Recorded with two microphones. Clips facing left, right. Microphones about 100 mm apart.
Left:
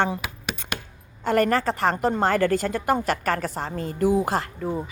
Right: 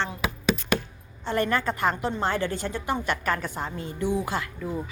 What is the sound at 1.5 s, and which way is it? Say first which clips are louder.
A woman's voice: left 3 dB; 35° left (ahead or behind).